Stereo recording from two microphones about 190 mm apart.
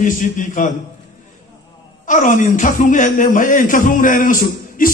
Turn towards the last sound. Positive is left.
turn(degrees=45)  # may be behind; listen again after turning